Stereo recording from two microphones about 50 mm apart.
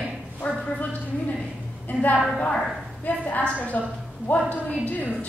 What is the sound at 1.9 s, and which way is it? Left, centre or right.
Speech, left.